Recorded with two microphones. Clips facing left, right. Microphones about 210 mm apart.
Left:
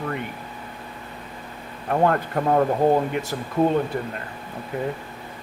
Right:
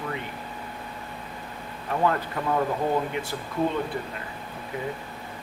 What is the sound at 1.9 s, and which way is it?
Speech, 50° left (ahead or behind).